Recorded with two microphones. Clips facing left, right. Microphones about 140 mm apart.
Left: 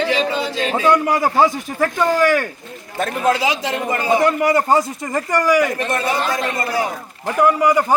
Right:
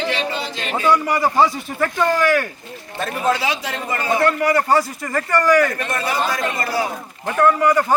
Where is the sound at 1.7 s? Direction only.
10° left (ahead or behind).